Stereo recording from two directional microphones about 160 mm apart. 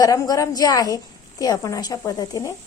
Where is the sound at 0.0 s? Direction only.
20° left (ahead or behind).